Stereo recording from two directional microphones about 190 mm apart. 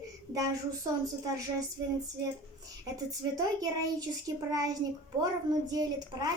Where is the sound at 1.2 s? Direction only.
20° right (ahead or behind).